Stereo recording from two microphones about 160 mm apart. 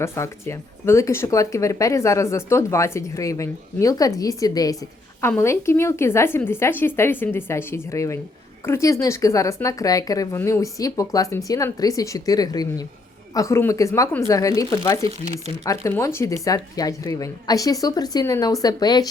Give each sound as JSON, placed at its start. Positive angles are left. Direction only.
{"t": 0.0, "sound": "speech", "side_deg": 15}